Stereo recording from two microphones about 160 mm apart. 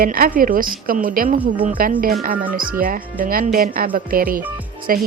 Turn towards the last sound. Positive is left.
turn(degrees=-65)  # may be behind; listen again after turning